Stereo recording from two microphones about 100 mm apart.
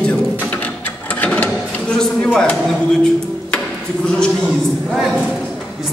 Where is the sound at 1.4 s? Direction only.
10° left (ahead or behind).